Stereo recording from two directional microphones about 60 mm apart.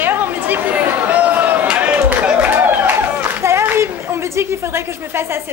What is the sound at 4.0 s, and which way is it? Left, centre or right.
A woman's voice, right.